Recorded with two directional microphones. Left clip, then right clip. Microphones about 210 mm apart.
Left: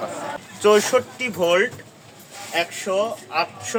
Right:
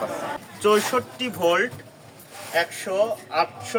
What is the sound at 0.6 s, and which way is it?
Speech, 25° left (ahead or behind).